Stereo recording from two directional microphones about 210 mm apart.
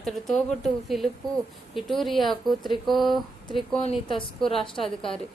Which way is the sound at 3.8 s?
25° left (ahead or behind).